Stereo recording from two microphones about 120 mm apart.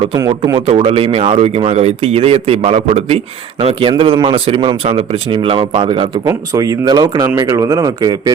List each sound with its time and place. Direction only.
0.2 s speech: 30° right (ahead or behind)
0.7 s speech: 55° right (ahead or behind)
6.2 s speech: 25° right (ahead or behind)